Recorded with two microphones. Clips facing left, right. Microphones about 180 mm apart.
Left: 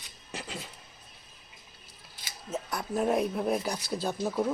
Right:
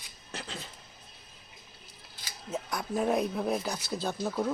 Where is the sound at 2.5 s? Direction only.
5° left (ahead or behind).